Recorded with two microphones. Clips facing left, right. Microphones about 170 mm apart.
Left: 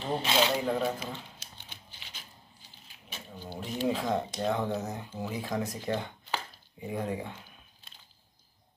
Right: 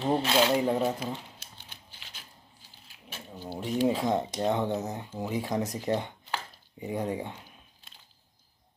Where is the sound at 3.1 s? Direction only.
5° right (ahead or behind).